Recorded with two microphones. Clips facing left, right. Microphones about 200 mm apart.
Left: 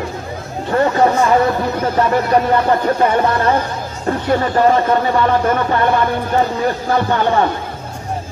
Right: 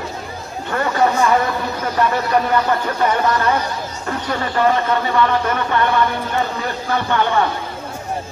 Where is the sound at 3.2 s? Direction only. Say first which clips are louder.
Left 2 dB; 30° left (ahead or behind).